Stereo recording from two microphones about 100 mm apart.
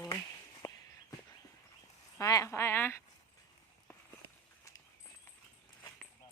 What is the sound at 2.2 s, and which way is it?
Speech, 35° left (ahead or behind).